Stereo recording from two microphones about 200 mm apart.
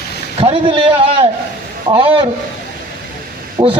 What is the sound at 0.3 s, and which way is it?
Speech, 25° right (ahead or behind).